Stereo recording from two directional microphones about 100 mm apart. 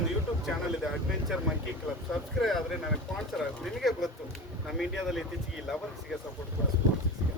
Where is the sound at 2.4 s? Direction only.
5° left (ahead or behind).